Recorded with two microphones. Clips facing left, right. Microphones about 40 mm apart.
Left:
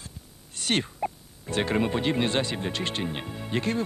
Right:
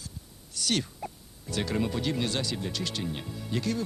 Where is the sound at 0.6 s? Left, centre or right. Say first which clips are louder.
Left 3 dB; left.